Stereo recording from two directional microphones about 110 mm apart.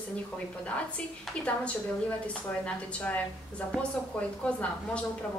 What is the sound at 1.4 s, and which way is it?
A woman's voice, 10° left (ahead or behind).